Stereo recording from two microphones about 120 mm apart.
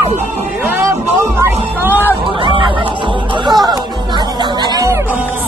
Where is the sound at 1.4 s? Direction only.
15° right (ahead or behind).